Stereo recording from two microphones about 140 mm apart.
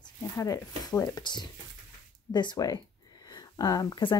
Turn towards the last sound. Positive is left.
turn(degrees=30)  # may be behind; listen again after turning